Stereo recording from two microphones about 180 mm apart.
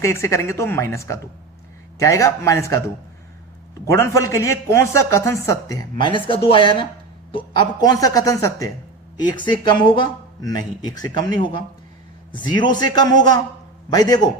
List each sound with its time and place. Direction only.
0.0 s speech: 15° left (ahead or behind)